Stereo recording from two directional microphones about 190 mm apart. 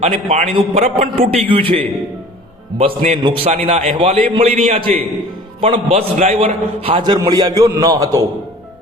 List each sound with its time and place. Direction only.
0.0 s a man's voice: 35° right (ahead or behind); by 8.2 s 20° right (ahead or behind)